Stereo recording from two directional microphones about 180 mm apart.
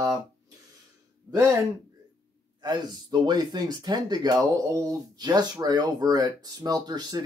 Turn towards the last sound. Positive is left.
turn(degrees=-20)  # may be behind; listen again after turning